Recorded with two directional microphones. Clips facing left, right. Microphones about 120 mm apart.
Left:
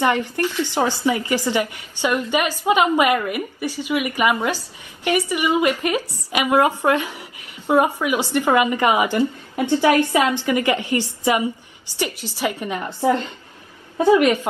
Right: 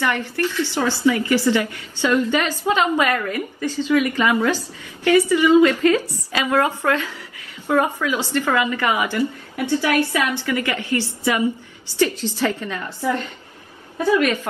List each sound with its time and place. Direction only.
0.0 s a woman's voice: 15° left (ahead or behind)